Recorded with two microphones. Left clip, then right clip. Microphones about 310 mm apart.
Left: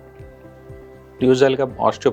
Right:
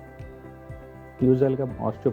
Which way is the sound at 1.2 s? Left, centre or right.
Centre.